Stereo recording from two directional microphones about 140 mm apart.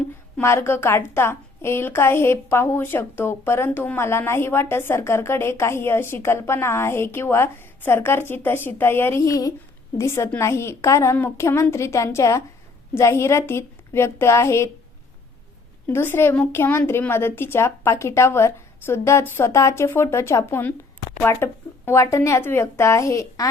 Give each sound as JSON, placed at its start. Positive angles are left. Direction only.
{"t": 0.3, "sound": "a woman's voice", "side_deg": 20}
{"t": 15.9, "sound": "a woman's voice", "side_deg": 15}